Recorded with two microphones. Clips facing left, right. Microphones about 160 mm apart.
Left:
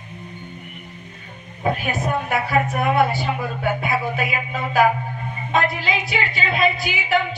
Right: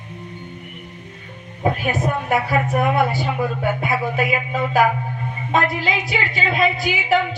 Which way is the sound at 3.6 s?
40° right (ahead or behind).